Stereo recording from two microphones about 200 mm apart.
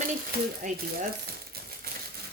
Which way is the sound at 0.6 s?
50° right (ahead or behind).